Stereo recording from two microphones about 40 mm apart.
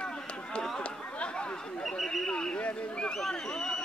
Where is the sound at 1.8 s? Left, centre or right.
Centre.